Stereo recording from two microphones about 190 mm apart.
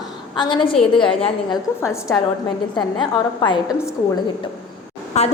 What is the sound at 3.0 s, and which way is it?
Speech, 25° left (ahead or behind).